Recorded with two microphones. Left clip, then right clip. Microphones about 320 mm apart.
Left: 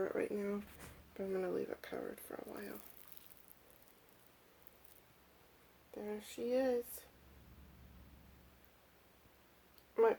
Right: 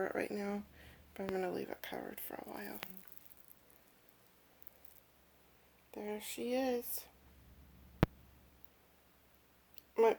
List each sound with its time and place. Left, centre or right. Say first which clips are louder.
0.0 s speech: even; right
5.9 s speech: right 2 dB; right
9.9 s speech: right 2 dB; right